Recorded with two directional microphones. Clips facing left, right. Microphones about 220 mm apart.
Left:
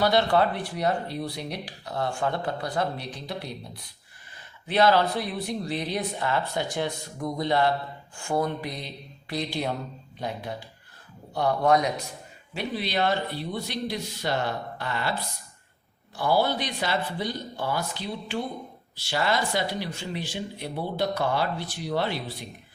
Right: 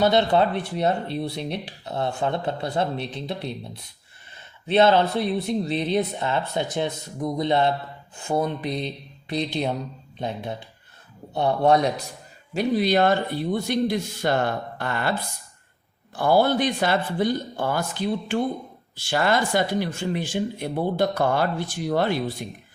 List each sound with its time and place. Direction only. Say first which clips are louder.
0.0 s speech: right 3 dB; 20° right (ahead or behind)
12.5 s speech: right 8 dB; 45° right (ahead or behind)
16.1 s speech: right 5 dB; 50° right (ahead or behind)